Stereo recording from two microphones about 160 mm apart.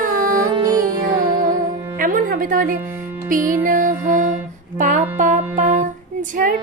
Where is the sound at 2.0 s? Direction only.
60° right (ahead or behind).